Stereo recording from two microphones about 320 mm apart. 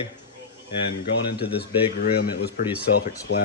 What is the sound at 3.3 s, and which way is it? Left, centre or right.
Speech, left.